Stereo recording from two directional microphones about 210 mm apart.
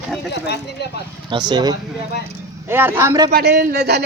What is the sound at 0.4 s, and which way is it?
Speech, 50° left (ahead or behind).